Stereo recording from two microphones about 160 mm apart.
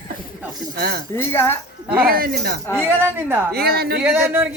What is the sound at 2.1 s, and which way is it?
Speech, 65° right (ahead or behind).